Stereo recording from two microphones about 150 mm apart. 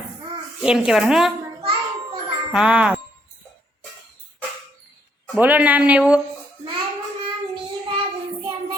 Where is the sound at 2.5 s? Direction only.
5° right (ahead or behind).